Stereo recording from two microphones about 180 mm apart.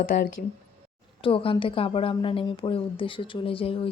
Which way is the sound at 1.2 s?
30° left (ahead or behind).